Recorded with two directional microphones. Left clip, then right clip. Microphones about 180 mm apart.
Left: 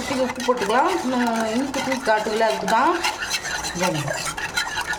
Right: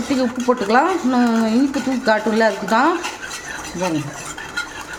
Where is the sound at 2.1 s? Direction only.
30° right (ahead or behind).